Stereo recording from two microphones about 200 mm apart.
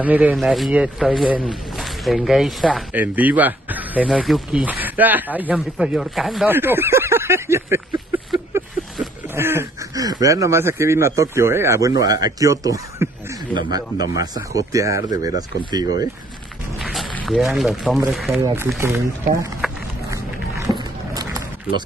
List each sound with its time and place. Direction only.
0.0 s speech: 10° right (ahead or behind)
9.3 s speech: 10° right (ahead or behind)
16.7 s speech: centre (ahead or behind)
18.3 s speech: 15° right (ahead or behind)
19.6 s a sound: centre (ahead or behind)
20.1 s a sound: 15° right (ahead or behind)